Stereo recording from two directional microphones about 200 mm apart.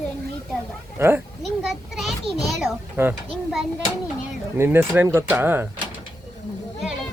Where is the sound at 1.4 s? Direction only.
Centre (ahead or behind).